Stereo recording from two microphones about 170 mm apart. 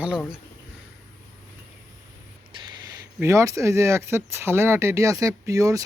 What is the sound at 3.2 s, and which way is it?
Speech, 15° right (ahead or behind).